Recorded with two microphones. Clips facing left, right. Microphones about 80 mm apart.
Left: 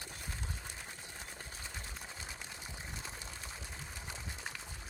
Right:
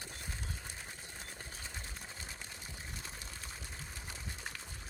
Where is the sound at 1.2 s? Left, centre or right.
Centre.